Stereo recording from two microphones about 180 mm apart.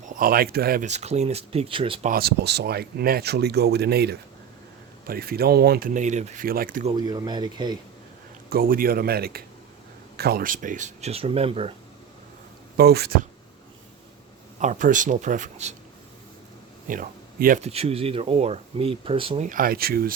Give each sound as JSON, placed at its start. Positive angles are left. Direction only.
{"t": 0.0, "sound": "speech", "side_deg": -50}
{"t": 0.9, "sound": "speech", "side_deg": -40}
{"t": 2.0, "sound": "speech", "side_deg": -60}
{"t": 6.9, "sound": "speech", "side_deg": -25}
{"t": 8.4, "sound": "speech", "side_deg": -55}
{"t": 12.7, "sound": "speech", "side_deg": -60}
{"t": 14.6, "sound": "speech", "side_deg": -45}
{"t": 16.9, "sound": "speech", "side_deg": -50}
{"t": 17.7, "sound": "speech", "side_deg": -35}
{"t": 19.5, "sound": "speech", "side_deg": -55}